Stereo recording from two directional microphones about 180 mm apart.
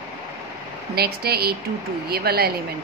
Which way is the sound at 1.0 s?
60° right (ahead or behind).